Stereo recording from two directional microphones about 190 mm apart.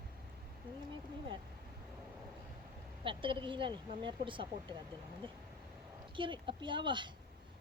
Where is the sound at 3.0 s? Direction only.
25° right (ahead or behind).